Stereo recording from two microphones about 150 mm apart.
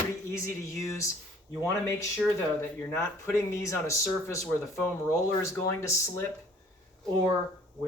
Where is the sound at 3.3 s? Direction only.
20° left (ahead or behind).